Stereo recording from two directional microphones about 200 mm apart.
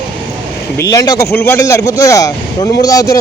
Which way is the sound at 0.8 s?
15° left (ahead or behind).